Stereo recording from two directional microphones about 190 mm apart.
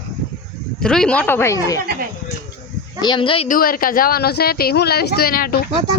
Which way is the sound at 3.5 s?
50° left (ahead or behind).